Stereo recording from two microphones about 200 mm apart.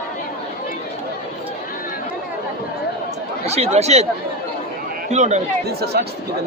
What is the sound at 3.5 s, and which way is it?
Speech, 30° right (ahead or behind).